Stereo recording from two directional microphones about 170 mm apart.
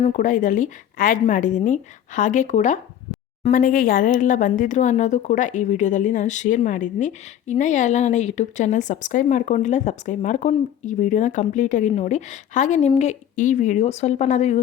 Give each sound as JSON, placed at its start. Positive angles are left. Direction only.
{"t": 0.0, "sound": "speech", "side_deg": 45}